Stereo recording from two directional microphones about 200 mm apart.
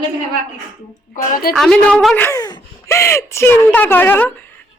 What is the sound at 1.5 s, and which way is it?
Speech, centre (ahead or behind).